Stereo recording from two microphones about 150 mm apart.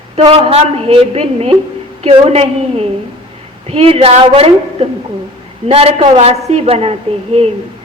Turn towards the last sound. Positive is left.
turn(degrees=-40)  # may be behind; listen again after turning